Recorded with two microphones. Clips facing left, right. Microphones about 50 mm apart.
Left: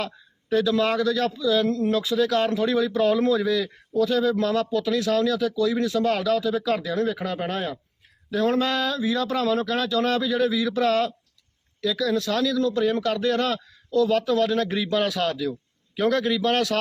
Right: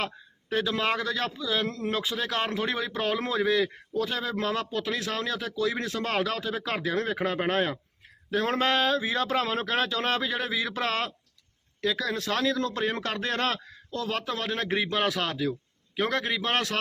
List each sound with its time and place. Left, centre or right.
0.5 s a man's voice: right